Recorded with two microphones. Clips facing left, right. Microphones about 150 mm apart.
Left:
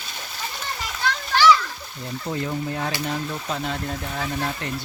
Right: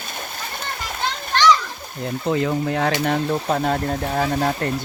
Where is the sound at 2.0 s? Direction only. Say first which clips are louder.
Right 7 dB; 90° right.